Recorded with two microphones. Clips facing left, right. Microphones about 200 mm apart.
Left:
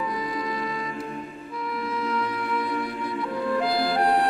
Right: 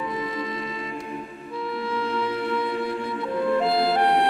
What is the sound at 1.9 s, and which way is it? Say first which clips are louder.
Music: right 2 dB; 30° right (ahead or behind).